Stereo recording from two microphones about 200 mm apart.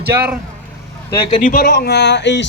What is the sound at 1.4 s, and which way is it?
Speech, 50° left (ahead or behind).